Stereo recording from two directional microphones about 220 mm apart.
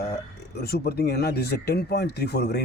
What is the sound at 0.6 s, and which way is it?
Speech, 45° left (ahead or behind).